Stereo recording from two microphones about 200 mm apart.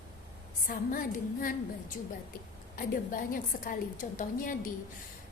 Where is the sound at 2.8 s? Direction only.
45° left (ahead or behind).